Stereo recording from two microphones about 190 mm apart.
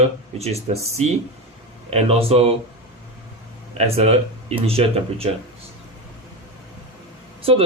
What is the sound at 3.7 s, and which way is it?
Speech, 35° right (ahead or behind).